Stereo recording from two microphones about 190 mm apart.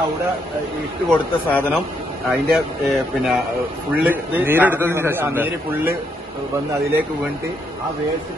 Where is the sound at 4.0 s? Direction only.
10° right (ahead or behind).